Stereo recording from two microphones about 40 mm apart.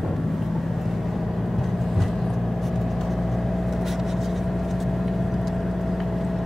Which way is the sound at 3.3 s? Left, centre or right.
Centre.